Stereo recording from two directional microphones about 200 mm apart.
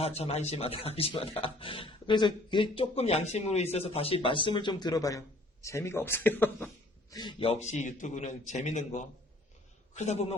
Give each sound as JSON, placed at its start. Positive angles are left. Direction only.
{"t": 0.0, "sound": "a man's voice", "side_deg": 30}
{"t": 7.1, "sound": "a man's voice", "side_deg": 20}